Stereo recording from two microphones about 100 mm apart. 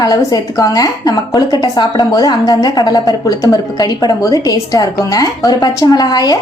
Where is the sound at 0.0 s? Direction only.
40° left (ahead or behind).